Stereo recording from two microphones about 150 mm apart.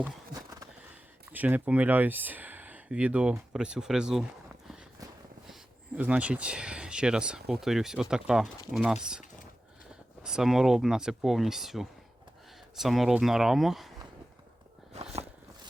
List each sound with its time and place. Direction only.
1.3 s speech: 10° right (ahead or behind)
6.0 s speech: 10° right (ahead or behind)
10.2 s speech: 5° right (ahead or behind)
14.9 s walk: 45° right (ahead or behind)